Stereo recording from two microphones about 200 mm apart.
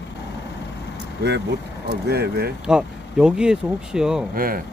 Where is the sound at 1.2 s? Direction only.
55° right (ahead or behind).